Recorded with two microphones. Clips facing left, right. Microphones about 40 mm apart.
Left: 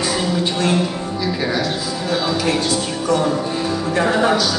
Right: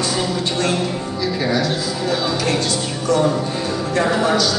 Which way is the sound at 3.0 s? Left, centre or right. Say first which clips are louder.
Right 2 dB; centre.